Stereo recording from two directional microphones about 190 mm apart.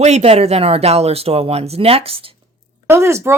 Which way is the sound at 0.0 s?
35° right (ahead or behind).